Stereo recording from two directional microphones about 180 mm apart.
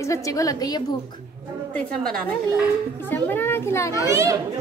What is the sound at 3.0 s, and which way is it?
A child's voice, 10° left (ahead or behind).